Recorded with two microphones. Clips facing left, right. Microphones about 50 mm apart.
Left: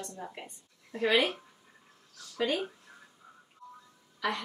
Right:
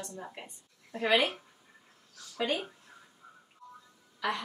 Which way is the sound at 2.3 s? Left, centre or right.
Centre.